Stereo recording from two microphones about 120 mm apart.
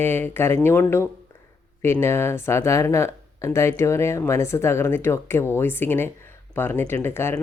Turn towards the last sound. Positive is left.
turn(degrees=20)  # may be behind; listen again after turning